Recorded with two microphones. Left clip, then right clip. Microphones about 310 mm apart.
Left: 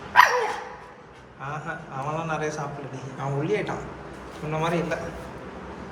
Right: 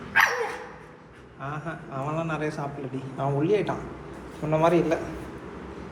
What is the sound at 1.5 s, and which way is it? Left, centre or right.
A man's voice, centre.